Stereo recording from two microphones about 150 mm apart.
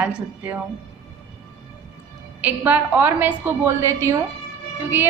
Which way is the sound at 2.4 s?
10° right (ahead or behind).